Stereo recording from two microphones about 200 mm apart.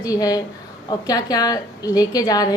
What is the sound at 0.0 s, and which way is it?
A woman's voice, 20° left (ahead or behind).